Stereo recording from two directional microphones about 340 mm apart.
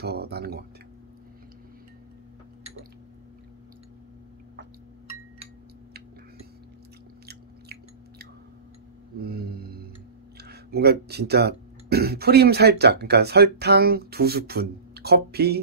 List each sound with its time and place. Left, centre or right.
0.0 s speech: right
7.2 s chewing: right
9.2 s a sound: right
10.3 s speech: right